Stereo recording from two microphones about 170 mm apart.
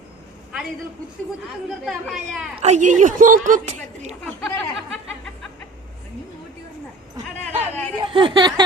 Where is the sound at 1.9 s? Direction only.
Centre (ahead or behind).